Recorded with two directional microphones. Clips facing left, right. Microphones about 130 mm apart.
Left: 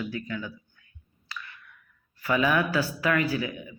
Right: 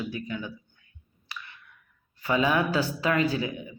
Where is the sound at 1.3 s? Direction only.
20° right (ahead or behind).